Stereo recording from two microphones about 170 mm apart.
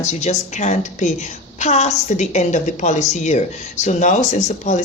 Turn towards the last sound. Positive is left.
turn(degrees=45)  # may be behind; listen again after turning